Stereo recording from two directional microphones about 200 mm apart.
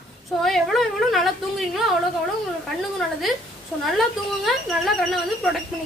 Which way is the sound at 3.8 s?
Centre (ahead or behind).